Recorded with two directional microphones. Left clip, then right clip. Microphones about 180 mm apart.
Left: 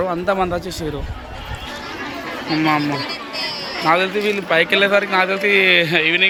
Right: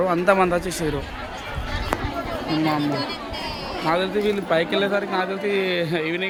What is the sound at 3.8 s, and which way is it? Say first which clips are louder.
A man's voice: left 5 dB; 5° left (ahead or behind).